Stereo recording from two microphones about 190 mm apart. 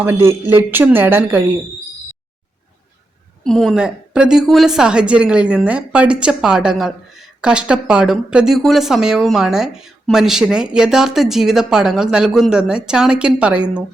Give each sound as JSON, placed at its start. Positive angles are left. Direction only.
{"t": 0.0, "sound": "a man's voice", "side_deg": -10}
{"t": 3.4, "sound": "a woman's voice", "side_deg": 0}